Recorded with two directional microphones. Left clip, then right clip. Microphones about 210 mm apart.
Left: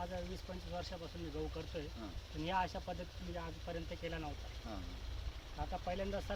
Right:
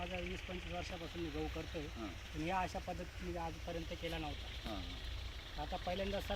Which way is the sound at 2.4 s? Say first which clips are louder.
Left 1 dB; 15° left (ahead or behind).